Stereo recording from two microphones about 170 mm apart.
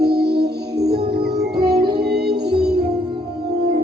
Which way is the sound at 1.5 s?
25° right (ahead or behind).